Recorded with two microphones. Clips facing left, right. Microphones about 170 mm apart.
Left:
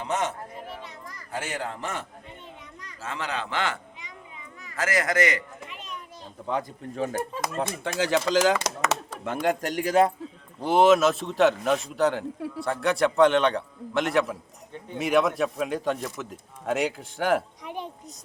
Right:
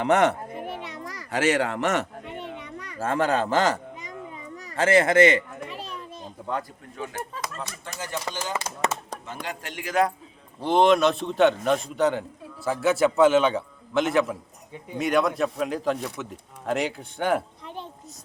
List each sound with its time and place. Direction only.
0.0 s a child's voice: 65° right (ahead or behind)
0.7 s children playing: 70° right (ahead or behind); by 4.1 s 40° right (ahead or behind)
4.8 s a child's voice: 25° right (ahead or behind)
6.9 s speech: 35° left (ahead or behind)
7.5 s speech: 60° left (ahead or behind); by 8.7 s 90° left
9.2 s speech: 55° left (ahead or behind); by 10.1 s 30° left (ahead or behind)
10.6 s speech: 5° left (ahead or behind)